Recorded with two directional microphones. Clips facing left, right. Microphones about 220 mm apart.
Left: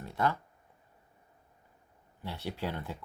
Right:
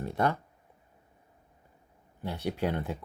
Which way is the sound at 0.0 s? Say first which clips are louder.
Right 3 dB; 20° right (ahead or behind).